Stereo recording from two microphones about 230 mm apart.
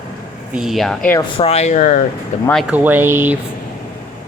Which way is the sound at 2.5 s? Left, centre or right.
Centre.